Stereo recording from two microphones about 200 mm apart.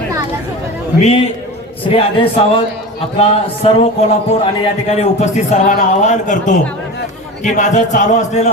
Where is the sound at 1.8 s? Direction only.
25° left (ahead or behind).